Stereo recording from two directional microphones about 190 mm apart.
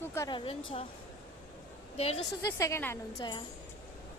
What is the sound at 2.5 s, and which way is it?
Speech, 15° left (ahead or behind).